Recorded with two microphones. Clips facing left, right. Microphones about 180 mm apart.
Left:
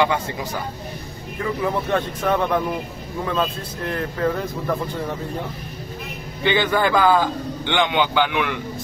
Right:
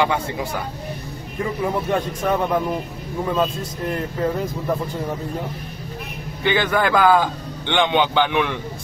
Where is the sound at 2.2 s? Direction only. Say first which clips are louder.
Even; 10° right (ahead or behind).